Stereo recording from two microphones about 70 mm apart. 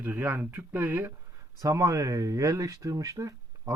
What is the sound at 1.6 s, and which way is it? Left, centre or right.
Speech, right.